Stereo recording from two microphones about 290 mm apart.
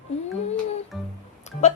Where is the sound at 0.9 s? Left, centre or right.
Centre.